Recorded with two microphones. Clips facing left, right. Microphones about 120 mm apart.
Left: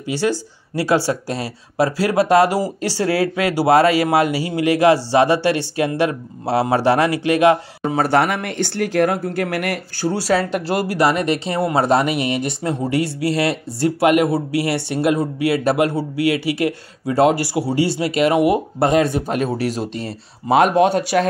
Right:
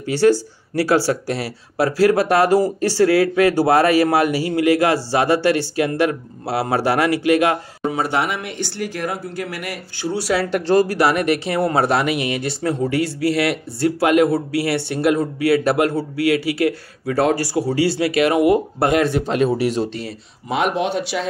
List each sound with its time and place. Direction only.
0.0 s speech: 15° left (ahead or behind)
3.1 s speech: 35° left (ahead or behind)
3.4 s speech: 20° left (ahead or behind)
7.9 s speech: 40° left (ahead or behind)
9.9 s speech: 35° left (ahead or behind)
10.5 s speech: 20° left (ahead or behind)
19.2 s speech: 5° left (ahead or behind)
19.9 s speech: 30° left (ahead or behind)
20.5 s speech: 45° left (ahead or behind)